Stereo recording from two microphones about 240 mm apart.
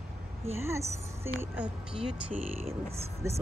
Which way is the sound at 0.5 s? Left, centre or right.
Centre.